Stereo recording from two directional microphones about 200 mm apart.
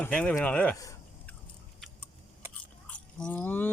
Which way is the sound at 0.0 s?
5° left (ahead or behind).